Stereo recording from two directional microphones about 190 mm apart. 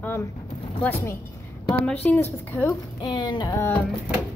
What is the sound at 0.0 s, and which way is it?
Speech, 15° left (ahead or behind).